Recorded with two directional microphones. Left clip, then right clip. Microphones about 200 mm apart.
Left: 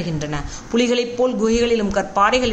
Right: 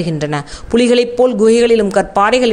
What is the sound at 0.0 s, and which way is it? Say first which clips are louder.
A woman's voice: right 7 dB; 40° right (ahead or behind).